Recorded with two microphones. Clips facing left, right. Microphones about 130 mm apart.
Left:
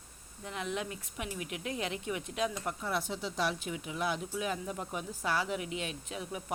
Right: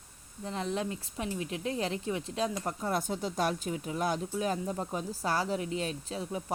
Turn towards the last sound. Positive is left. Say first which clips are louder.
# right 4 dB
turn(degrees=-30)  # may be behind; listen again after turning